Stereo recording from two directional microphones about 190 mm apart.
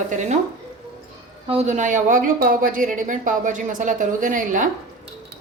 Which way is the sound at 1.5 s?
35° right (ahead or behind).